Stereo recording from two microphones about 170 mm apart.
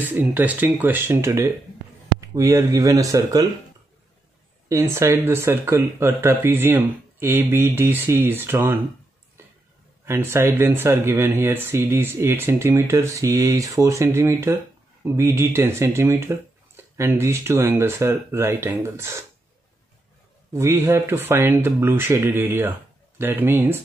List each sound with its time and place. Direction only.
0.1 s speech: 10° right (ahead or behind)
4.6 s speech: 15° right (ahead or behind)
10.0 s speech: 15° right (ahead or behind)
20.5 s speech: 15° right (ahead or behind)